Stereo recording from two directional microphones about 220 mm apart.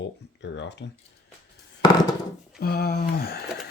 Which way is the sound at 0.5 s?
55° left (ahead or behind).